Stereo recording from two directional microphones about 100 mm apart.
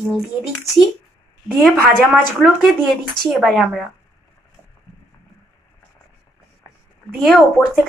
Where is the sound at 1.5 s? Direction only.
Centre (ahead or behind).